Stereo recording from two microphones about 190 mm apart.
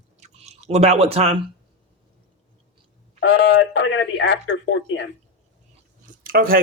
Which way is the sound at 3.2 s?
90° left.